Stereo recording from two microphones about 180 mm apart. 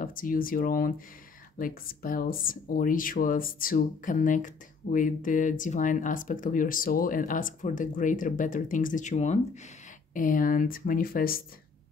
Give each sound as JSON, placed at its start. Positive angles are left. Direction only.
{"t": 0.0, "sound": "speech", "side_deg": 50}